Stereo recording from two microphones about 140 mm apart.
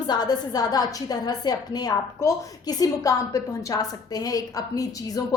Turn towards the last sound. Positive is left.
turn(degrees=25)  # may be behind; listen again after turning